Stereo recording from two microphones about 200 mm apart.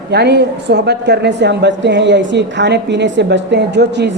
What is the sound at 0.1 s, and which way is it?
A woman's voice, 55° right (ahead or behind).